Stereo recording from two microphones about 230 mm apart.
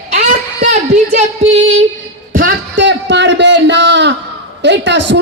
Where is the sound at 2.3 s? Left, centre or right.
Right.